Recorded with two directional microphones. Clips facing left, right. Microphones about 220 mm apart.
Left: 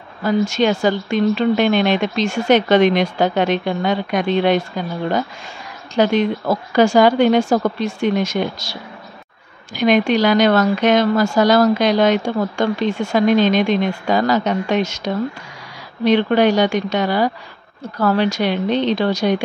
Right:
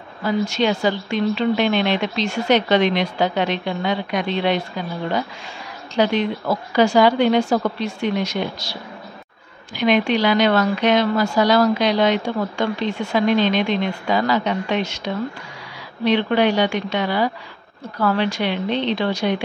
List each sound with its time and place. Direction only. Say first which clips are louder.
0.2 s a woman's voice: left 3 dB; 45° left (ahead or behind)
5.9 s a woman's voice: left 3 dB; 45° left (ahead or behind)
9.8 s a woman's voice: left 3 dB; 45° left (ahead or behind)